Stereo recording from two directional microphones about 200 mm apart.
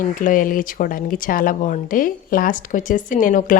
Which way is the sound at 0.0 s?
40° left (ahead or behind).